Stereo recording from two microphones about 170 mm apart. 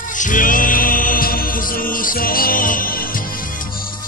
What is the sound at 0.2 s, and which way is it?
Mantra, 50° left (ahead or behind).